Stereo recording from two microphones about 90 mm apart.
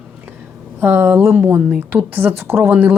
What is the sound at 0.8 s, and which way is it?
A woman's voice, 25° right (ahead or behind).